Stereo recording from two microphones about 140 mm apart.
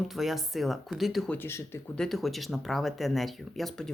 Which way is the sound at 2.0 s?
Centre (ahead or behind).